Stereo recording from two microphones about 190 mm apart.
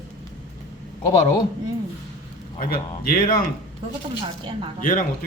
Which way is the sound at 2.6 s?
50° left (ahead or behind).